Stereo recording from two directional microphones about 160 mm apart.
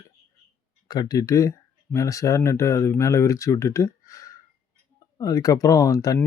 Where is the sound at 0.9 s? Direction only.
25° left (ahead or behind).